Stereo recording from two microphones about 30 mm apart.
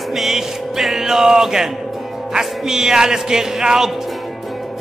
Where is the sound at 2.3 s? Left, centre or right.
Centre.